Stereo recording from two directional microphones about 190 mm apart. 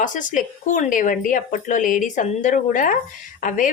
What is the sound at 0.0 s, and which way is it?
Speech, 45° left (ahead or behind).